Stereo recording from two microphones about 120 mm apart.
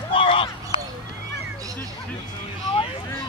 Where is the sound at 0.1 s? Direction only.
45° left (ahead or behind).